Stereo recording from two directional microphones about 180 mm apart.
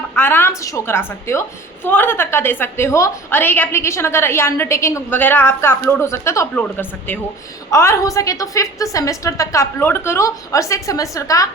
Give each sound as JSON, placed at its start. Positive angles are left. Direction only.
{"t": 0.2, "sound": "a woman's voice", "side_deg": 10}